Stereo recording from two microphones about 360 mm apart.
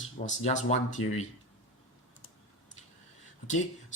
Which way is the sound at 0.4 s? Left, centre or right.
Centre.